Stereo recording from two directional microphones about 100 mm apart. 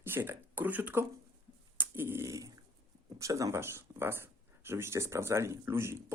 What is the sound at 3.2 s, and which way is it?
Speech, 35° right (ahead or behind).